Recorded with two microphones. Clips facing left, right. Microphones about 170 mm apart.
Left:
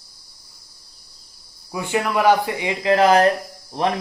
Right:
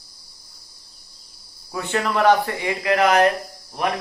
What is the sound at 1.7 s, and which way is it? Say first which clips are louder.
Speech: left 1 dB; 10° left (ahead or behind).